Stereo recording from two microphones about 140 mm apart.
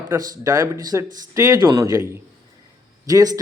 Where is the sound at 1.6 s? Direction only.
35° right (ahead or behind).